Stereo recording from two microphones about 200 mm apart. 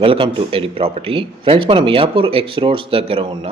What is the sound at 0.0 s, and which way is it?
A man's voice, 25° right (ahead or behind).